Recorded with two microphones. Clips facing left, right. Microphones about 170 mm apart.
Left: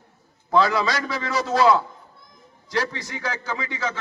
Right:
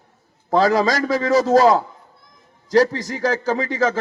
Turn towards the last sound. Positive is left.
turn(degrees=-40)  # may be behind; listen again after turning